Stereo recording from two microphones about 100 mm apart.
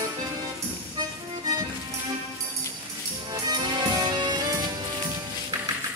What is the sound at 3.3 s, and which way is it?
Music, 45° right (ahead or behind).